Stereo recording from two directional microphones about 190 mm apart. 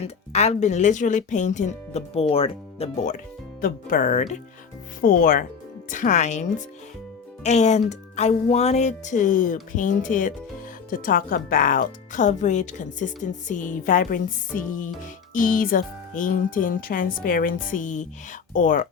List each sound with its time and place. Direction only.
0.3 s speech: 35° left (ahead or behind)
3.6 s speech: 45° left (ahead or behind)